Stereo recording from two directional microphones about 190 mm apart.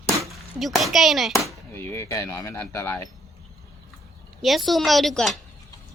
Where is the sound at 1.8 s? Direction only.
15° left (ahead or behind).